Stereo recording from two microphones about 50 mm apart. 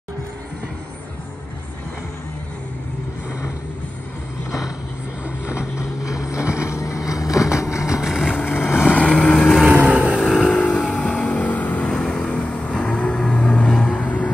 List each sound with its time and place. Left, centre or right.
5.8 s vehicle: left
7.9 s vehicle: centre
8.5 s vehicle: left
8.7 s vehicle: centre
9.0 s vehicle: left
9.3 s vehicle: centre
9.8 s vehicle: right
10.6 s vehicle: left
11.9 s vehicle: centre
13.9 s vehicle: left